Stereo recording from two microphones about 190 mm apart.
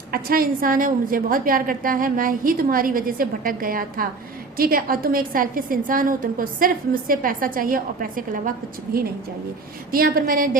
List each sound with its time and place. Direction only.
0.1 s a woman's voice: 50° right (ahead or behind)